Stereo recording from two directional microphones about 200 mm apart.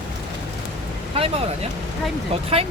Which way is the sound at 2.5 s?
30° right (ahead or behind).